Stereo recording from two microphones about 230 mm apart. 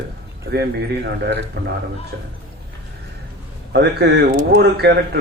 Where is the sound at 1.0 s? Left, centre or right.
Right.